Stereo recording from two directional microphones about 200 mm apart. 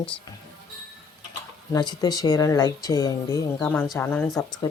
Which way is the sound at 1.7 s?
20° left (ahead or behind).